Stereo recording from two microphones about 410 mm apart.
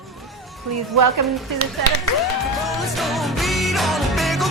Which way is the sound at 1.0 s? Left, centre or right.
Right.